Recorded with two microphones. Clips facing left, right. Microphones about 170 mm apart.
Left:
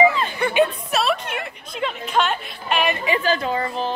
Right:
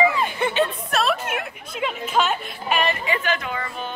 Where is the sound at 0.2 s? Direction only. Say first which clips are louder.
Even; 20° right (ahead or behind).